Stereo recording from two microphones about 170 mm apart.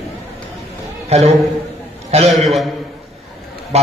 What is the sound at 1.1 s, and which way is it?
Speech, 40° right (ahead or behind).